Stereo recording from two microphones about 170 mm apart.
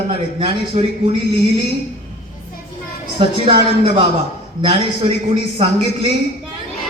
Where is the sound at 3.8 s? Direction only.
85° left.